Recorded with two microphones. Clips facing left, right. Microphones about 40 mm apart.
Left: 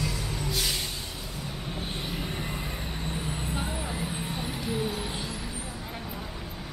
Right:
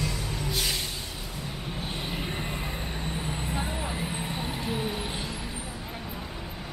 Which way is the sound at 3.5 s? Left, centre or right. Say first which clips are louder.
Right 1 dB; centre.